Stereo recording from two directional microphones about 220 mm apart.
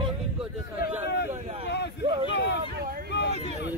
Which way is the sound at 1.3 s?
25° right (ahead or behind).